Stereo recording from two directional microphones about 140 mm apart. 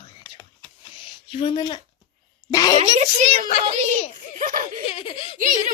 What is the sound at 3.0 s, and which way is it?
A child's voice, 60° right (ahead or behind).